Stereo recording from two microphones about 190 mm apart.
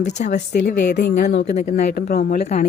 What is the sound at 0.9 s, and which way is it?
Speech, 55° left (ahead or behind).